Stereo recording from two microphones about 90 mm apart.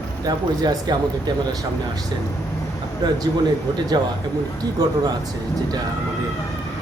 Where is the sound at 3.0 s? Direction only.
50° right (ahead or behind).